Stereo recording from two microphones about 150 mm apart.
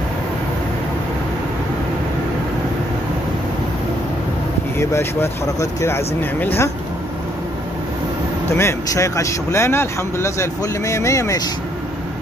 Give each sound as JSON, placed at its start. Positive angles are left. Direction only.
{"t": 4.7, "sound": "speech", "side_deg": 20}
{"t": 8.5, "sound": "speech", "side_deg": 20}